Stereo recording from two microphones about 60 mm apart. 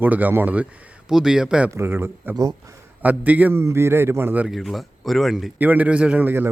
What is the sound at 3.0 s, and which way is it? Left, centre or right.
Speech, right.